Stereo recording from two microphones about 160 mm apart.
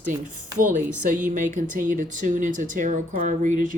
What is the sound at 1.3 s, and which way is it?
Speech, 55° right (ahead or behind).